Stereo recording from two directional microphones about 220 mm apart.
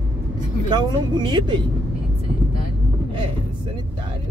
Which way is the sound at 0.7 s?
20° right (ahead or behind).